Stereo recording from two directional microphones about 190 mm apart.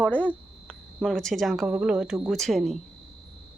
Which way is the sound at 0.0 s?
10° left (ahead or behind).